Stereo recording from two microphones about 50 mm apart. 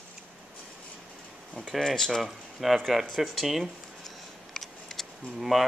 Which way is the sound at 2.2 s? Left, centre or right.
Centre.